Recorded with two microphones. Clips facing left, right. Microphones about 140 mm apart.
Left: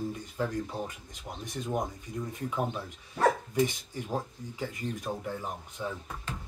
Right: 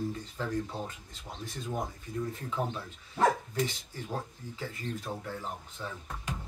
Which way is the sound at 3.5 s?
15° left (ahead or behind).